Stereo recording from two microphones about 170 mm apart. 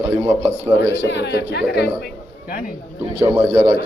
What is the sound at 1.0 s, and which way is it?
Speech, 85° left.